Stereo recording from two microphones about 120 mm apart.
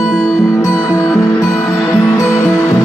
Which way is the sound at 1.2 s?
25° left (ahead or behind).